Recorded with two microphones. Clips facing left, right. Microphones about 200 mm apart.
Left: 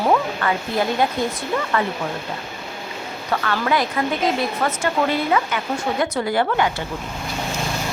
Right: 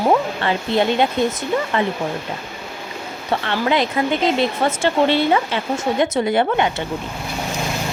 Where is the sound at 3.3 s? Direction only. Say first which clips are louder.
Right 2 dB; 25° right (ahead or behind).